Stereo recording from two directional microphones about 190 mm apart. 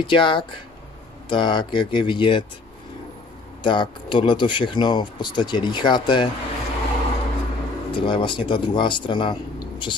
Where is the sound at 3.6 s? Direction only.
25° left (ahead or behind).